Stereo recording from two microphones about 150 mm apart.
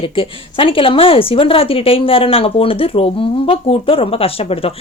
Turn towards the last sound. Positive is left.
turn(degrees=40)  # may be behind; listen again after turning